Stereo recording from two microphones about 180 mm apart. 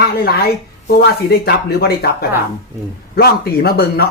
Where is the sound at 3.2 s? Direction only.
60° left (ahead or behind).